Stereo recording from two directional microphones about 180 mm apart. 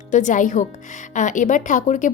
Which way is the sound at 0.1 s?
45° left (ahead or behind).